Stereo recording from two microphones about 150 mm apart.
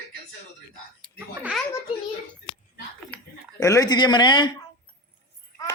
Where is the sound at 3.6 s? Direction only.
25° left (ahead or behind).